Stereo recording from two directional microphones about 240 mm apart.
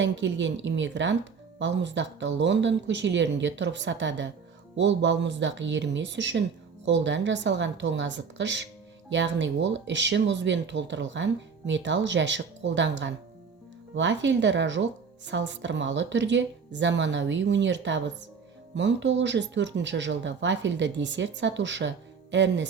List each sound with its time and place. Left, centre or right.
0.0 s speech: right